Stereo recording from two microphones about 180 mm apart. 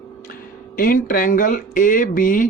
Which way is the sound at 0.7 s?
50° left (ahead or behind).